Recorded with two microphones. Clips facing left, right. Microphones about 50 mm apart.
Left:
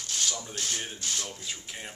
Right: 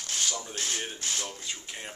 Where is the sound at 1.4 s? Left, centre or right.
Centre.